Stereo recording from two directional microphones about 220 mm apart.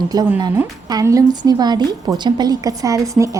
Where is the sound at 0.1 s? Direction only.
15° right (ahead or behind).